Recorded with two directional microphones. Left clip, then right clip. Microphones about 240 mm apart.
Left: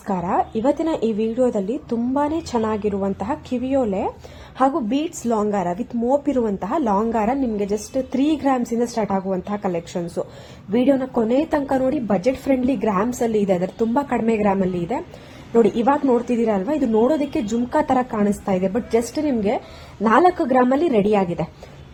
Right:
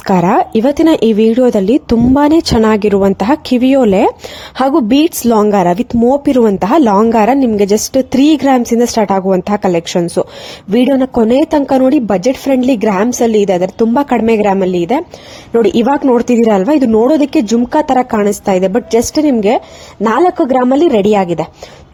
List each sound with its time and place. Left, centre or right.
0.1 s a woman's voice: right